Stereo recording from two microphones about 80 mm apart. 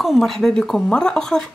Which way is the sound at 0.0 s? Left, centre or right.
Centre.